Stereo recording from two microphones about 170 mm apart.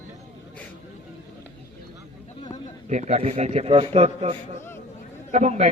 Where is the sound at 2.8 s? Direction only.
45° right (ahead or behind).